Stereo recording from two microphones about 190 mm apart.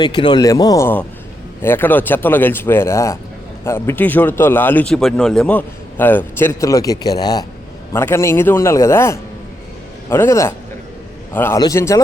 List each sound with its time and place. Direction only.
0.0 s speech: 25° left (ahead or behind)